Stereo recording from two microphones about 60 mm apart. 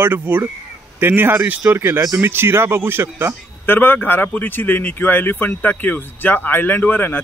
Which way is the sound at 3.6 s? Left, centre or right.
Left.